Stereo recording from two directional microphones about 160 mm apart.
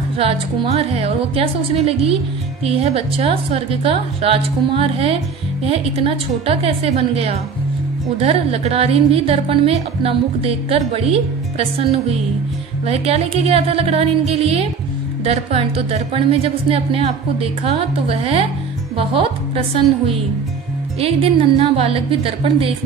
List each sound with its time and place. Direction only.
0.2 s a woman's voice: 40° right (ahead or behind)
19.5 s a woman's voice: 35° right (ahead or behind)